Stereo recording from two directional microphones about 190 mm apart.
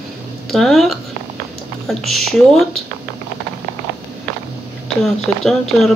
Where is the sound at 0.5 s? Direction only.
Centre (ahead or behind).